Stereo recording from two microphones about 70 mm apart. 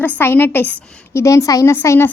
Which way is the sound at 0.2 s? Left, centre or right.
Left.